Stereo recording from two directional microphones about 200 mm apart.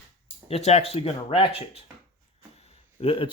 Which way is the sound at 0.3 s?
30° left (ahead or behind).